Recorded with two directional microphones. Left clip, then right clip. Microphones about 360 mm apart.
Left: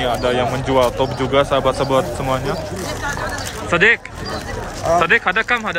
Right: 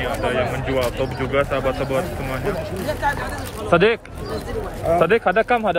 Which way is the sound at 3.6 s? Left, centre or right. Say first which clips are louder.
Left 2 dB; centre.